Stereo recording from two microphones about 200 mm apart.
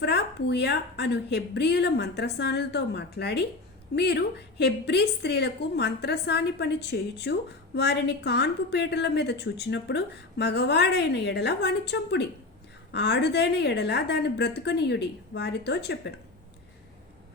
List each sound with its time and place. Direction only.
0.0 s a woman's voice: 55° left (ahead or behind)